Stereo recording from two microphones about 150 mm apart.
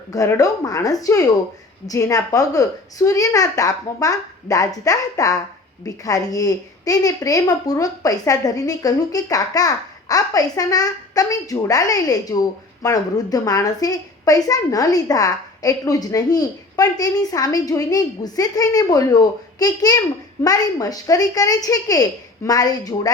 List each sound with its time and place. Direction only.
0.1 s a woman's voice: 20° left (ahead or behind)